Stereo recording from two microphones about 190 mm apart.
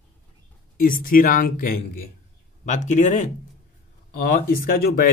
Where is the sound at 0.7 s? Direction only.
50° left (ahead or behind).